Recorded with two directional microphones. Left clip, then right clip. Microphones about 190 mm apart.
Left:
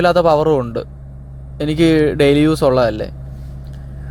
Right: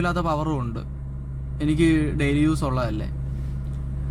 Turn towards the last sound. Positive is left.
turn(degrees=30)  # may be behind; listen again after turning